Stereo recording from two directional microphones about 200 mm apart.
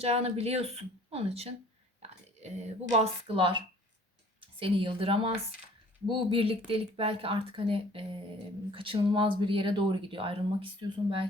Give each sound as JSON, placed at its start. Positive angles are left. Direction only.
{"t": 0.0, "sound": "a woman's voice", "side_deg": -30}